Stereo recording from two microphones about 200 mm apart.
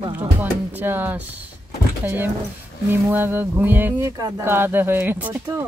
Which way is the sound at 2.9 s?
10° right (ahead or behind).